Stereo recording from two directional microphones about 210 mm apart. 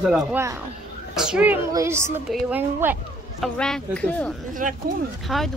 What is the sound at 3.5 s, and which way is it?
Speech, 5° left (ahead or behind).